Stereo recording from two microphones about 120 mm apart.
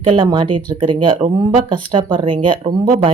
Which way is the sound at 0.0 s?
45° right (ahead or behind).